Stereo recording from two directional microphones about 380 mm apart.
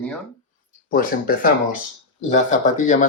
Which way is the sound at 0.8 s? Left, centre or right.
Left.